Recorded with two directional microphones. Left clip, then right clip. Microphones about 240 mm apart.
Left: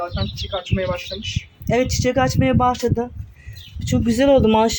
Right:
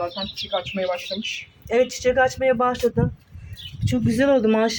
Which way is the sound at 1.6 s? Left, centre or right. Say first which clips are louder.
Even; centre.